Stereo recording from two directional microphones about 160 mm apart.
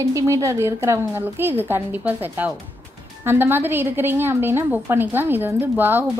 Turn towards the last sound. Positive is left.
turn(degrees=-15)  # may be behind; listen again after turning